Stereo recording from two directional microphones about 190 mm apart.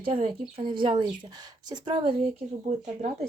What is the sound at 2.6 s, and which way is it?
Speech, 35° right (ahead or behind).